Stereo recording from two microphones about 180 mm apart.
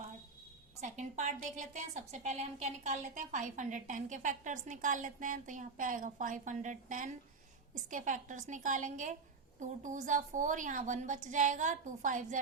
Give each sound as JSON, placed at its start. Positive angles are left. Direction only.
{"t": 0.8, "sound": "a woman's voice", "side_deg": -40}